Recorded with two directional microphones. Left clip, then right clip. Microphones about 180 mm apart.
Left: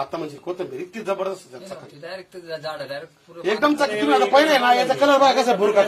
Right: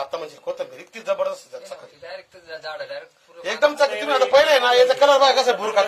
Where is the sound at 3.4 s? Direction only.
35° right (ahead or behind).